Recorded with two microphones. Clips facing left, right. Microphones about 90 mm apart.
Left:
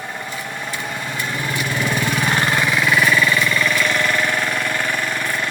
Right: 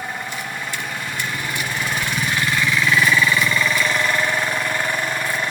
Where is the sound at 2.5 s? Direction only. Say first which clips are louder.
Left 1 dB; 20° left (ahead or behind).